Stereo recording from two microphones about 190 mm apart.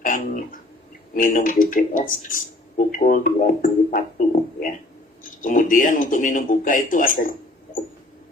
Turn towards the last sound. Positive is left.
turn(degrees=45)  # may be behind; listen again after turning